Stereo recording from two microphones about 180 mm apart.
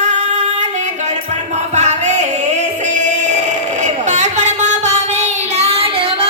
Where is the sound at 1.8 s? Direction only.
40° right (ahead or behind).